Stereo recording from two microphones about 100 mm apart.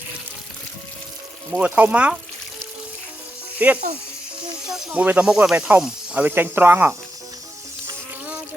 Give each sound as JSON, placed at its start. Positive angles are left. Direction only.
{"t": 1.5, "sound": "speech", "side_deg": -10}
{"t": 3.6, "sound": "speech", "side_deg": -15}
{"t": 4.6, "sound": "speech", "side_deg": -5}
{"t": 5.0, "sound": "speech", "side_deg": -15}